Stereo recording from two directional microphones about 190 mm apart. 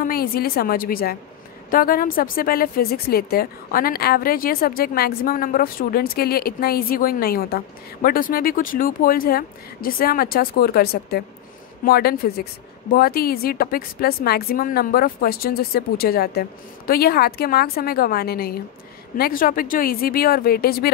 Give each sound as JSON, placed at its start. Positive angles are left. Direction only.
{"t": 0.0, "sound": "a woman's voice", "side_deg": 50}